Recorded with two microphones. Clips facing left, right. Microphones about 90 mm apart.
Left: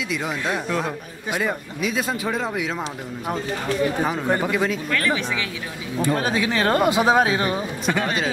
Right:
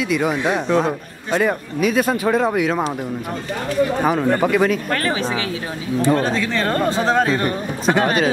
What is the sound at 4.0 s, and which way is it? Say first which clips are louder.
Speech: right 5 dB; 60° right (ahead or behind).